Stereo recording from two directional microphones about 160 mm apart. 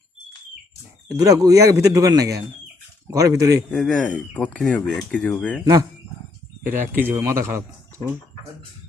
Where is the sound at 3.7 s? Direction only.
5° left (ahead or behind).